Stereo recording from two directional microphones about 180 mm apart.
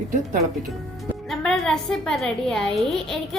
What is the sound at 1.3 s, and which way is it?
A woman's voice, centre (ahead or behind).